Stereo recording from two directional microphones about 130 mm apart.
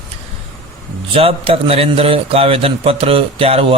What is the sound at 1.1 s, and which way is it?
Speech, 45° right (ahead or behind).